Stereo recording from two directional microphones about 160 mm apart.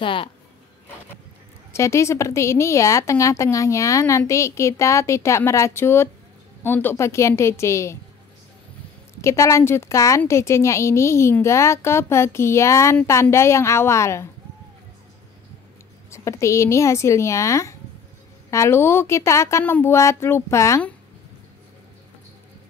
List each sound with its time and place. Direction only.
0.0 s speech: 30° left (ahead or behind)
1.7 s a woman's voice: 15° left (ahead or behind)
9.2 s a woman's voice: 20° left (ahead or behind)
16.1 s a woman's voice: 20° left (ahead or behind)